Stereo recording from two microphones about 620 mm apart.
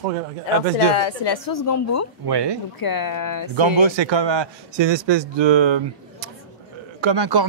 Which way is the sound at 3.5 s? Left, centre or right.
Right.